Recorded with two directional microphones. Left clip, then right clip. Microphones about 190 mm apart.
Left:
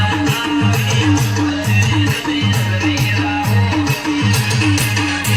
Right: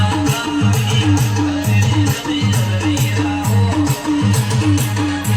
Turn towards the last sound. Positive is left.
turn(degrees=-65)  # may be behind; listen again after turning